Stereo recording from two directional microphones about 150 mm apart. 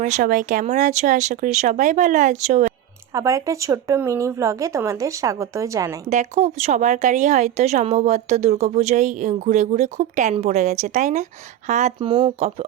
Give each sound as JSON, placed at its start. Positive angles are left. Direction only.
{"t": 0.0, "sound": "speech", "side_deg": -60}
{"t": 3.1, "sound": "speech", "side_deg": -20}
{"t": 6.1, "sound": "speech", "side_deg": -50}
{"t": 11.9, "sound": "speech", "side_deg": -35}